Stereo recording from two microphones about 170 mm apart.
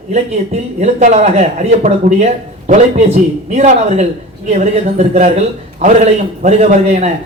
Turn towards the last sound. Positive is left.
turn(degrees=-40)  # may be behind; listen again after turning